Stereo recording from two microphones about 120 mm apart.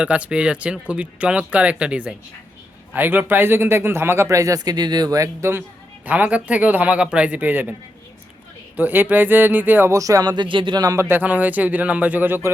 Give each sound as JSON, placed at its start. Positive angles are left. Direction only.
{"t": 0.0, "sound": "speech", "side_deg": -10}
{"t": 8.7, "sound": "speech", "side_deg": -15}
{"t": 11.1, "sound": "speech", "side_deg": -15}